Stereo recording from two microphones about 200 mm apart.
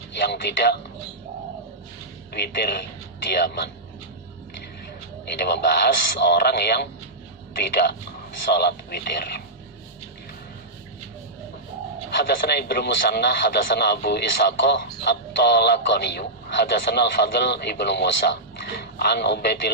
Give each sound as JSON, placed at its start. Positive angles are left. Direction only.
{"t": 0.3, "sound": "speech", "side_deg": 55}
{"t": 2.3, "sound": "a man's voice", "side_deg": 50}
{"t": 5.4, "sound": "a man's voice", "side_deg": 55}
{"t": 12.5, "sound": "speech", "side_deg": 55}